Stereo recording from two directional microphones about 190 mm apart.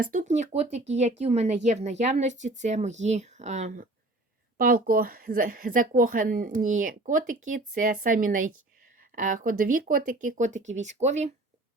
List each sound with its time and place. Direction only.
0.1 s speech: 40° right (ahead or behind)
4.5 s a woman's voice: 50° right (ahead or behind)